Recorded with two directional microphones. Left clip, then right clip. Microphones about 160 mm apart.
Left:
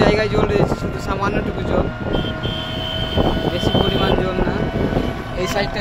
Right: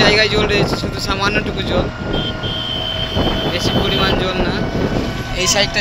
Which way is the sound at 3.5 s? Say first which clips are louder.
Right 2 dB; 10° right (ahead or behind).